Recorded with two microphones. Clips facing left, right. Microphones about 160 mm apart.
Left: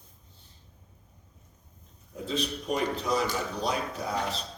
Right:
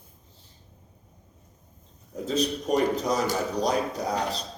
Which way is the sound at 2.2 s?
40° right (ahead or behind).